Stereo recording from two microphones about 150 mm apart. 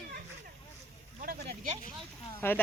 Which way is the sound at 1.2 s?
70° right (ahead or behind).